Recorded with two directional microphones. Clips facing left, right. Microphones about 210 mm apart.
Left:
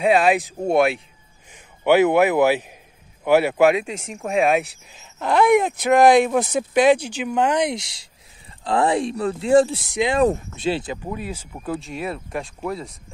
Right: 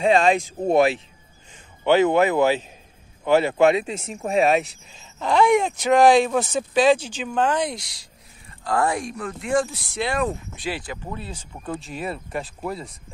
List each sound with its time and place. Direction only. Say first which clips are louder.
0.0 s speech: left 1 dB; 5° left (ahead or behind)
1.5 s speech: left 2 dB; 10° left (ahead or behind)
11.1 s speech: left 4 dB; 10° left (ahead or behind)